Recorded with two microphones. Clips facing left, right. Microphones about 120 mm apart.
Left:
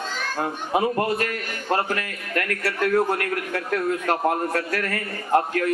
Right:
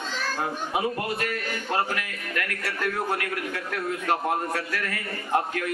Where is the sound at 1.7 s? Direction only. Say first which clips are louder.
Left 4 dB; 45° left (ahead or behind).